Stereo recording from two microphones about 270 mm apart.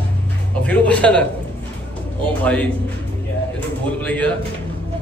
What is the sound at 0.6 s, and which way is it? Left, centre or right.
Speech, centre.